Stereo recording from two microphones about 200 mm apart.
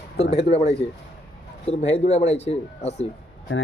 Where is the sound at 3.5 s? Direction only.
75° left (ahead or behind).